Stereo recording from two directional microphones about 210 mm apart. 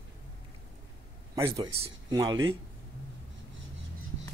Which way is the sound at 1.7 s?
30° right (ahead or behind).